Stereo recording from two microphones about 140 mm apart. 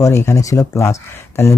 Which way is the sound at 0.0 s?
20° left (ahead or behind).